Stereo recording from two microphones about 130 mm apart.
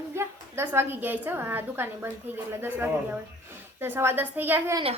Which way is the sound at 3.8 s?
15° right (ahead or behind).